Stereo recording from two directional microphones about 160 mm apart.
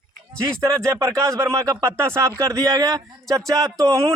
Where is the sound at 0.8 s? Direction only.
20° right (ahead or behind).